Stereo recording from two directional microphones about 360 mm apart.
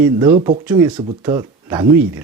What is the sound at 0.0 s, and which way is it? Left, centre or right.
Speech, centre.